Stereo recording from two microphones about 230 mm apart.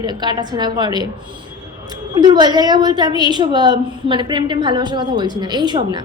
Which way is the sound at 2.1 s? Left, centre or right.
Centre.